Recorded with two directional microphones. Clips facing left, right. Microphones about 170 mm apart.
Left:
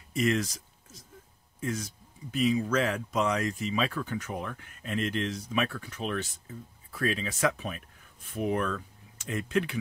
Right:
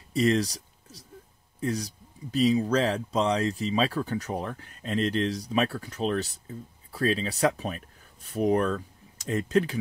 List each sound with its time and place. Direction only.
0.1 s speech: 35° right (ahead or behind)